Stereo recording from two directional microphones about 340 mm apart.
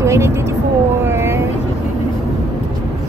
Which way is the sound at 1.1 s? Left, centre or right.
Centre.